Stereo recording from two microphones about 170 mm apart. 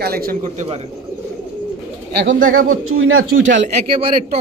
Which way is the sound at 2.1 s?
90° right.